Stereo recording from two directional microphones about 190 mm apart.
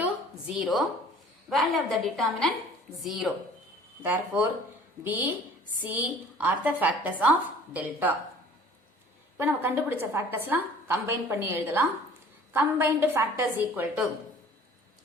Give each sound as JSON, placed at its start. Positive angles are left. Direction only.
{"t": 0.0, "sound": "a sound", "side_deg": -5}
{"t": 1.5, "sound": "a woman's voice", "side_deg": 0}
{"t": 5.8, "sound": "a woman's voice", "side_deg": -10}
{"t": 9.4, "sound": "a woman's voice", "side_deg": -10}